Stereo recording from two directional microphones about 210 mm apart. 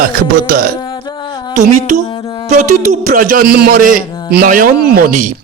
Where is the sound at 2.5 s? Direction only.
35° right (ahead or behind).